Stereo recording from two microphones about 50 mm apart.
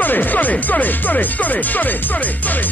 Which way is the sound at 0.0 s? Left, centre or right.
Left.